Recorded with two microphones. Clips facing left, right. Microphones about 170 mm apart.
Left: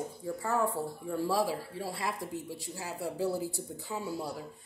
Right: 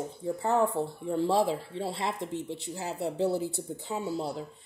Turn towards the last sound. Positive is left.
turn(degrees=-25)  # may be behind; listen again after turning